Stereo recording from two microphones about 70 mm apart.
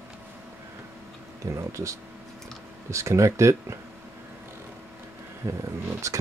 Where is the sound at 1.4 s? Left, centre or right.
Right.